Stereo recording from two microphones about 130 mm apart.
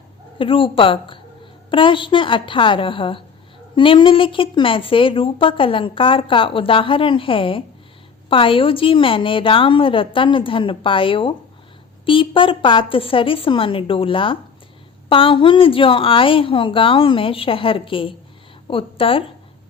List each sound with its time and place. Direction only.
0.3 s a woman's voice: 45° left (ahead or behind)